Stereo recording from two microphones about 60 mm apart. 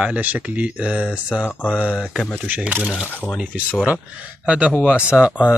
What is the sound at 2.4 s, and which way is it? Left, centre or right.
Speech, right.